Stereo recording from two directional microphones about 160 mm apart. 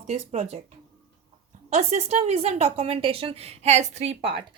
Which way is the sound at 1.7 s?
45° right (ahead or behind).